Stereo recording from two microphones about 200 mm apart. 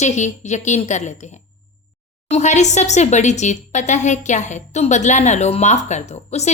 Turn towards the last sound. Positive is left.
turn(degrees=35)  # may be behind; listen again after turning